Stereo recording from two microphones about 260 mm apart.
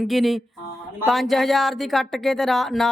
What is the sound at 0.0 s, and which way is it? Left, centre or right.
Speech, centre.